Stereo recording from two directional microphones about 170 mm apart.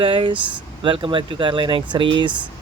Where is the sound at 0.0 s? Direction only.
30° right (ahead or behind).